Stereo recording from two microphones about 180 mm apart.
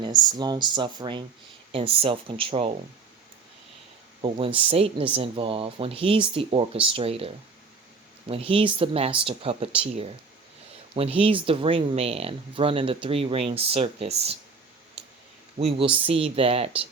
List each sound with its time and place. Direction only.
0.0 s speech: 25° right (ahead or behind)
4.2 s speech: 30° right (ahead or behind)
8.3 s speech: 30° right (ahead or behind)
15.5 s speech: 35° right (ahead or behind)